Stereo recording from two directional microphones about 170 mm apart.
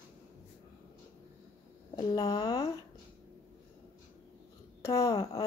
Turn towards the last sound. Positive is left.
turn(degrees=20)  # may be behind; listen again after turning